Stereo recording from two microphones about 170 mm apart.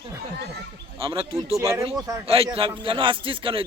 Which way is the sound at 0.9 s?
30° right (ahead or behind).